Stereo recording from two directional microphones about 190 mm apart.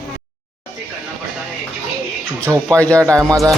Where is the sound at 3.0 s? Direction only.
15° right (ahead or behind).